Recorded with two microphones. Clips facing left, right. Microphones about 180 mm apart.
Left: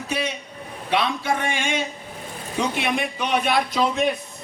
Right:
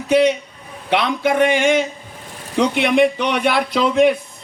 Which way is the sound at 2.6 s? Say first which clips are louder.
Right 9 dB; 75° right (ahead or behind).